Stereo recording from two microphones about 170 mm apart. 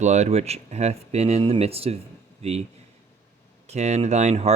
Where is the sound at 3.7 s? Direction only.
40° right (ahead or behind).